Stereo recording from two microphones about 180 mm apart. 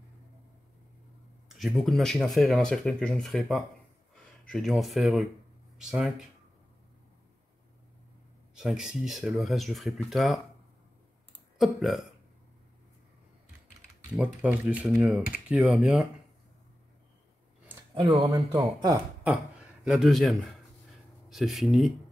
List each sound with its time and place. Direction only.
1.5 s speech: centre (ahead or behind)
8.5 s speech: 5° right (ahead or behind)
11.5 s speech: centre (ahead or behind)
14.1 s speech: 5° right (ahead or behind)
18.3 s speech: 20° right (ahead or behind)
19.8 s speech: 5° right (ahead or behind)